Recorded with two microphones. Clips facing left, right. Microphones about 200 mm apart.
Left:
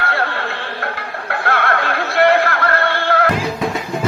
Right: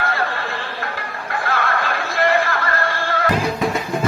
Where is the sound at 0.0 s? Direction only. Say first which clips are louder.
Left 2 dB; 65° left (ahead or behind).